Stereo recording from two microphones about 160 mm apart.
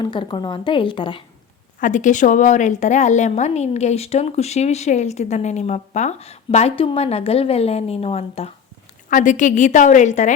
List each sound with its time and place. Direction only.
0.0 s a woman's voice: 30° left (ahead or behind)
1.8 s a woman's voice: 50° left (ahead or behind)
9.0 s a woman's voice: 55° left (ahead or behind)